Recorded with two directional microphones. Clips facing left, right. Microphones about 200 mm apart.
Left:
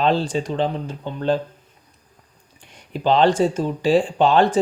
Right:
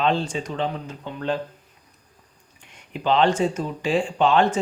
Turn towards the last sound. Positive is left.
turn(degrees=35)  # may be behind; listen again after turning